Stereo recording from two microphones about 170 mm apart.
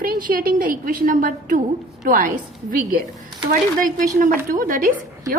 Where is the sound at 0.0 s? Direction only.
55° right (ahead or behind).